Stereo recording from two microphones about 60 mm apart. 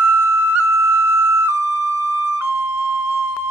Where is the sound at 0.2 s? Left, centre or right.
Right.